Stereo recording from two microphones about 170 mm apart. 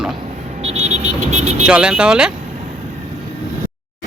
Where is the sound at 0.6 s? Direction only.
40° right (ahead or behind).